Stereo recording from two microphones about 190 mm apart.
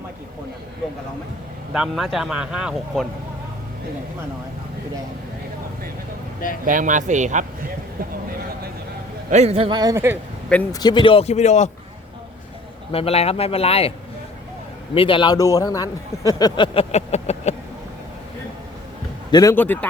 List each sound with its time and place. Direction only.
1.7 s speech: centre (ahead or behind)
6.7 s speech: 45° right (ahead or behind)
9.3 s a man's voice: 35° right (ahead or behind); by 10.2 s 15° right (ahead or behind)
10.7 s speech: 20° left (ahead or behind); by 11.7 s 35° left (ahead or behind)
12.9 s speech: 30° left (ahead or behind)
14.9 s a man's voice: 25° left (ahead or behind)
19.3 s speech: 20° left (ahead or behind)